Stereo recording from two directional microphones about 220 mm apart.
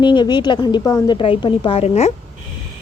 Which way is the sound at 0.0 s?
20° left (ahead or behind).